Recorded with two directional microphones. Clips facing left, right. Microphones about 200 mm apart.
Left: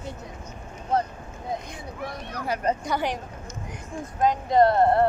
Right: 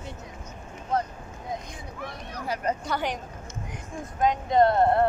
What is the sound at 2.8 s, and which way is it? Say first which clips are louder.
Speech: left 2 dB; 10° left (ahead or behind).